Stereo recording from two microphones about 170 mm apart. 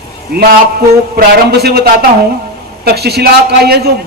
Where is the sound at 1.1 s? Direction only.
65° right (ahead or behind).